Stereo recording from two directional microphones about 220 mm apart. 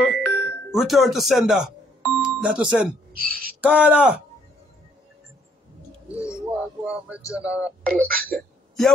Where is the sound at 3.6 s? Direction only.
5° right (ahead or behind).